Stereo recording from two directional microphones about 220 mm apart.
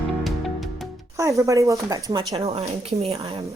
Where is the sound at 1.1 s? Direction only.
15° right (ahead or behind).